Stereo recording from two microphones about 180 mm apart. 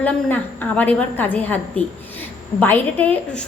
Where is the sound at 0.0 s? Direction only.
10° left (ahead or behind).